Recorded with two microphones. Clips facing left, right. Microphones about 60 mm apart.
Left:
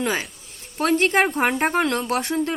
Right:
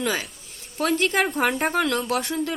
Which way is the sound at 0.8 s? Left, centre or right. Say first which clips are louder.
Left 3 dB; left.